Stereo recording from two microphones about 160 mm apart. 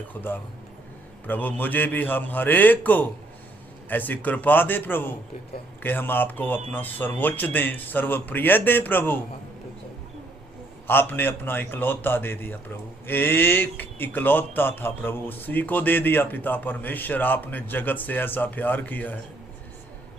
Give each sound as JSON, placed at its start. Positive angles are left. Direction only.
{"t": 0.1, "sound": "a man's voice", "side_deg": 10}
{"t": 10.8, "sound": "a man's voice", "side_deg": 10}